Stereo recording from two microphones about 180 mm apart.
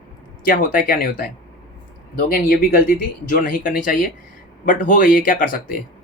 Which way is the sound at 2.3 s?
55° left (ahead or behind).